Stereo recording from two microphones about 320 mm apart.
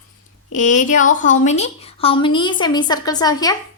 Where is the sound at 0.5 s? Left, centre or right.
Left.